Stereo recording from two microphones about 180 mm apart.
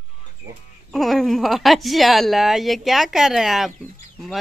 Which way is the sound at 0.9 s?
Centre (ahead or behind).